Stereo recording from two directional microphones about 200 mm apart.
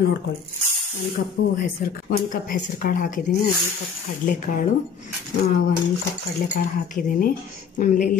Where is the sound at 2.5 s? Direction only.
50° left (ahead or behind).